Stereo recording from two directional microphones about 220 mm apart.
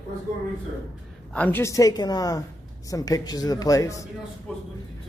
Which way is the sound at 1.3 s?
10° left (ahead or behind).